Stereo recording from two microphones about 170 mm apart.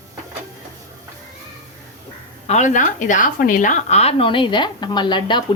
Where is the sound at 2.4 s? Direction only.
45° left (ahead or behind).